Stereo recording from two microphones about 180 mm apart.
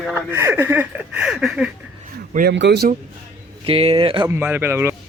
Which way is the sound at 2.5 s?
70° right (ahead or behind).